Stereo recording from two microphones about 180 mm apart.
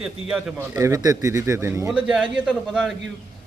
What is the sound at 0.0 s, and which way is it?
Speech, 5° right (ahead or behind).